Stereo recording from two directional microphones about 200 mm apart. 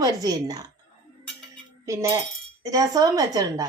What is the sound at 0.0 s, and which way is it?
Speech, 20° right (ahead or behind).